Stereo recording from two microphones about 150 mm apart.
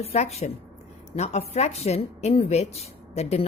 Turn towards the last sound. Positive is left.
turn(degrees=45)  # may be behind; listen again after turning